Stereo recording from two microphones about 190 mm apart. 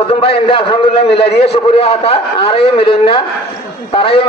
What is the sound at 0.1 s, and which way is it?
A man's voice, 30° left (ahead or behind).